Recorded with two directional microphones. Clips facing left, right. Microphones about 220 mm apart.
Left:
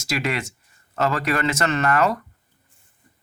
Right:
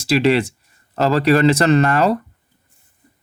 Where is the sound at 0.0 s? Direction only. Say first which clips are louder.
Right 10 dB; 35° right (ahead or behind).